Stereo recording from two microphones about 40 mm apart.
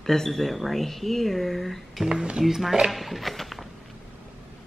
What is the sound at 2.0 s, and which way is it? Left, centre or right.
Speech, centre.